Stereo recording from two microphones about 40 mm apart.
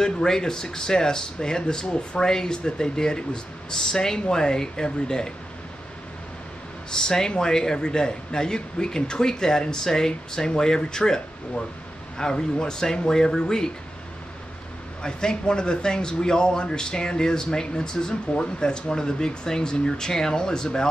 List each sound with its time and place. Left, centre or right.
0.0 s a man's voice: centre
6.9 s a man's voice: centre
12.2 s a man's voice: centre
15.0 s speech: left